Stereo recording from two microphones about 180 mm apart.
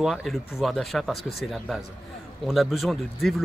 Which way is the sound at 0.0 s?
Centre (ahead or behind).